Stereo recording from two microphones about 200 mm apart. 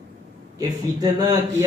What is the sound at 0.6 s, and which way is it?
Speech, 20° right (ahead or behind).